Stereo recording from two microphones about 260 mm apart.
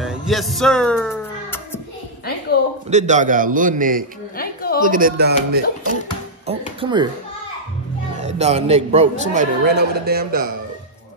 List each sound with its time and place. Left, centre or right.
0.0 s music: centre
2.9 s a man's voice: right
4.4 s a sound: left
4.8 s a man's voice: right
6.4 s speech: right
8.2 s a man's voice: right